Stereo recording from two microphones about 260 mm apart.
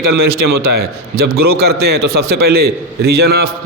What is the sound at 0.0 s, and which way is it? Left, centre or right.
A man's voice, right.